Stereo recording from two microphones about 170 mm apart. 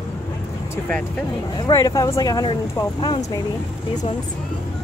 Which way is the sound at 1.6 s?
20° left (ahead or behind).